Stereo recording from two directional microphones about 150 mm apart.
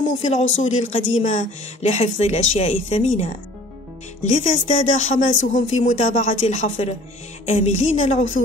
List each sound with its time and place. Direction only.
0.2 s speech: 50° left (ahead or behind)